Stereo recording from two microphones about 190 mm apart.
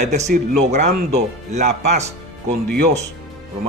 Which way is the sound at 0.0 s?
40° right (ahead or behind).